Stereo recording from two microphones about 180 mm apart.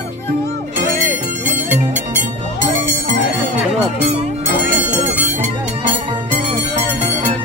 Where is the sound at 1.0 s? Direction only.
10° right (ahead or behind).